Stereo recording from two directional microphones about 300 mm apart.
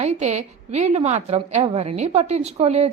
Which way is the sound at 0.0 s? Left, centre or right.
Right.